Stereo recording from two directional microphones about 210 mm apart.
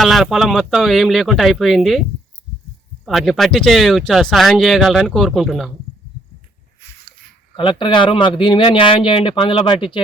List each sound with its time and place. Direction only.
0.0 s speech: centre (ahead or behind)
3.1 s speech: centre (ahead or behind)
7.5 s speech: 25° left (ahead or behind)